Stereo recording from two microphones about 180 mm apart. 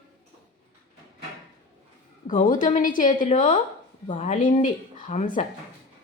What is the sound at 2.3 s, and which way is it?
Speech, 45° left (ahead or behind).